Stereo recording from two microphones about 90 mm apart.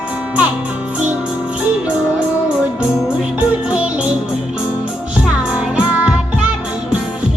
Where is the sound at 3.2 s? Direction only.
10° right (ahead or behind).